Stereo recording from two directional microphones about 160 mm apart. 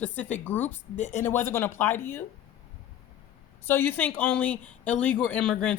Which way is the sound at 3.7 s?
10° left (ahead or behind).